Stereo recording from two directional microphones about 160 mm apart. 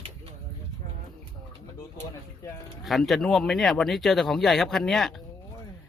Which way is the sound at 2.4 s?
20° left (ahead or behind).